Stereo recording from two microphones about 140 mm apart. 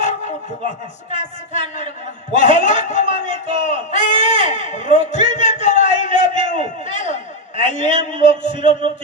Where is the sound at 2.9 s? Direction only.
60° left (ahead or behind).